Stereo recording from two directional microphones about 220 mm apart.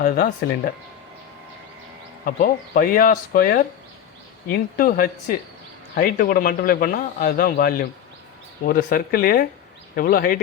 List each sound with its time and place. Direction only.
0.0 s a man's voice: 40° left (ahead or behind)
2.2 s a man's voice: 40° left (ahead or behind)